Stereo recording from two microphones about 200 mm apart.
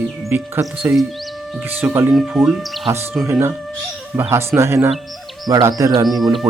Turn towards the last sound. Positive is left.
turn(degrees=0)  # may be behind; listen again after turning